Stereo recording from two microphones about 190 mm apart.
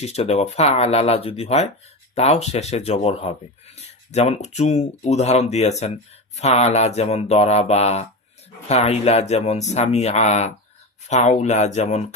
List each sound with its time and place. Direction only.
0.0 s speech: 35° left (ahead or behind)